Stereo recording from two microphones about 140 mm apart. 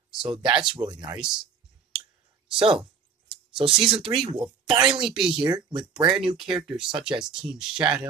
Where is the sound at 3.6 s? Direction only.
35° right (ahead or behind).